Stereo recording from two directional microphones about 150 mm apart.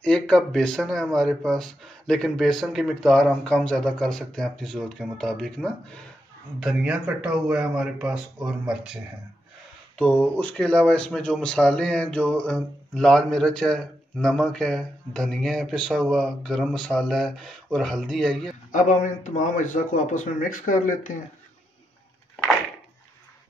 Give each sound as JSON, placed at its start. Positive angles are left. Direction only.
{"t": 0.0, "sound": "speech", "side_deg": 5}
{"t": 6.6, "sound": "speech", "side_deg": -5}
{"t": 9.9, "sound": "speech", "side_deg": 10}
{"t": 18.7, "sound": "speech", "side_deg": 60}